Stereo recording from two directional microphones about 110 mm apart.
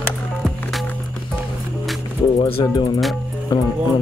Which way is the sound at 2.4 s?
50° left (ahead or behind).